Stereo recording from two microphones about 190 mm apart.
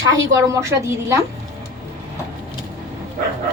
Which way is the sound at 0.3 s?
15° right (ahead or behind).